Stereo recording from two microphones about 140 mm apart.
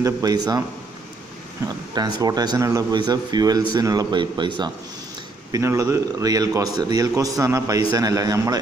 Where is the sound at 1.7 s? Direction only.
30° right (ahead or behind).